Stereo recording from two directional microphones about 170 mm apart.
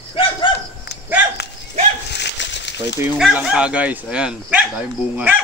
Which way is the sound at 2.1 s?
90° left.